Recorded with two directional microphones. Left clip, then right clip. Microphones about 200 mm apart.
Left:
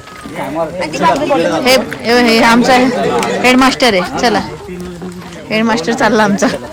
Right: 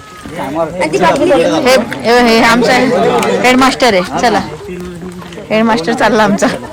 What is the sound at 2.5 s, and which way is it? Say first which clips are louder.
A woman's voice: even; 15° left (ahead or behind).